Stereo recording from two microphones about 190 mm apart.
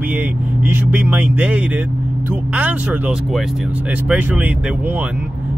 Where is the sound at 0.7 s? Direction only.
10° right (ahead or behind).